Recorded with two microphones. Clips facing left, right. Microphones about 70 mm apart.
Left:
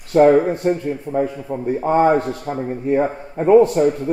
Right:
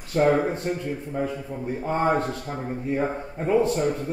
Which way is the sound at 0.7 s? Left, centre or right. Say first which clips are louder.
Left 8 dB; left.